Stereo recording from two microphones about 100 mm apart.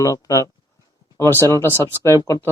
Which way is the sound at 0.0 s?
35° left (ahead or behind).